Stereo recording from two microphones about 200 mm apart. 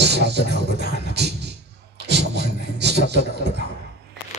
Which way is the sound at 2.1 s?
55° right (ahead or behind).